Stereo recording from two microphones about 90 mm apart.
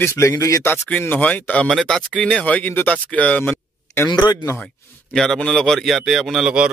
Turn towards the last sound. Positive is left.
turn(degrees=-5)  # may be behind; listen again after turning